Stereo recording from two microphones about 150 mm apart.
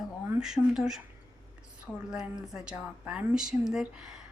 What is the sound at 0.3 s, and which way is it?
Speech, 5° right (ahead or behind).